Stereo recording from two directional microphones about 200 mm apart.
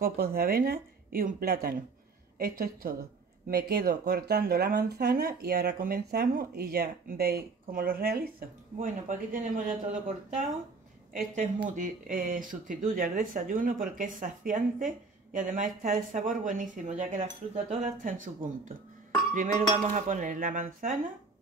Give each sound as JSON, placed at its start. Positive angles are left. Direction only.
{"t": 0.0, "sound": "speech", "side_deg": -50}
{"t": 11.7, "sound": "speech", "side_deg": -40}